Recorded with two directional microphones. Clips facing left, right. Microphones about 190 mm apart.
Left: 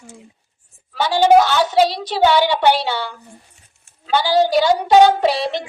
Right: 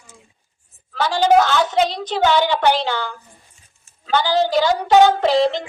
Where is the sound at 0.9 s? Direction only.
10° left (ahead or behind).